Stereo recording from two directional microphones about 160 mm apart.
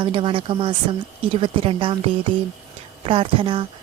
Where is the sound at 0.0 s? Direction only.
35° right (ahead or behind).